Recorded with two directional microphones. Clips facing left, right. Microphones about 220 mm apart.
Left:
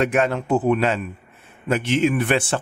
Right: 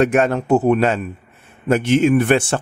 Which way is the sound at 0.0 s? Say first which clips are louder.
Right 4 dB; 45° right (ahead or behind).